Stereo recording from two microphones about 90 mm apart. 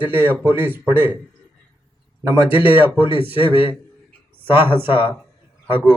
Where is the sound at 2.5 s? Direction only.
20° right (ahead or behind).